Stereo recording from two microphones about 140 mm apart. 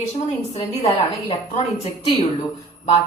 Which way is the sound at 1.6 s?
50° left (ahead or behind).